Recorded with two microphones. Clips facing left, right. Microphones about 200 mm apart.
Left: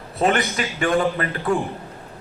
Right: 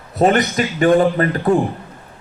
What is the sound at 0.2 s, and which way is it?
A man's voice, 40° right (ahead or behind).